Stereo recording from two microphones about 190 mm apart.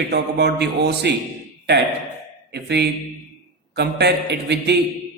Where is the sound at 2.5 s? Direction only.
60° right (ahead or behind).